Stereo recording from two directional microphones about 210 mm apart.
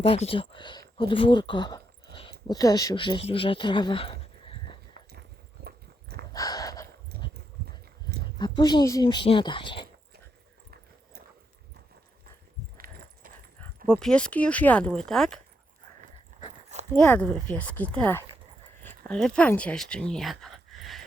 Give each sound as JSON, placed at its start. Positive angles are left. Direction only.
{"t": 0.0, "sound": "speech", "side_deg": 25}
{"t": 5.6, "sound": "horse", "side_deg": -50}
{"t": 6.3, "sound": "a sound", "side_deg": 15}
{"t": 8.0, "sound": "speech", "side_deg": 20}
{"t": 12.7, "sound": "a sound", "side_deg": -45}
{"t": 13.9, "sound": "speech", "side_deg": 5}
{"t": 16.9, "sound": "speech", "side_deg": 5}